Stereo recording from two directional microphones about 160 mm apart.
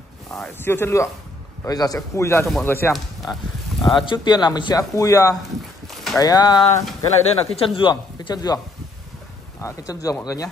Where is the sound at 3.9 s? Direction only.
30° left (ahead or behind).